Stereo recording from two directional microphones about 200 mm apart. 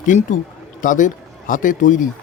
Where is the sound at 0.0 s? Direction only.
40° left (ahead or behind).